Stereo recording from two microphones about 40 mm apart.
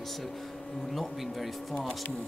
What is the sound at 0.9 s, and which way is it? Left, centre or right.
Speech, centre.